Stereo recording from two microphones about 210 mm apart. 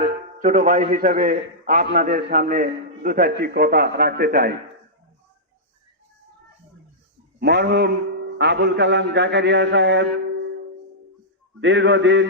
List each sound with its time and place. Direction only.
0.3 s a man's voice: 40° right (ahead or behind)
7.3 s a man's voice: 50° right (ahead or behind)
11.6 s a man's voice: 60° right (ahead or behind)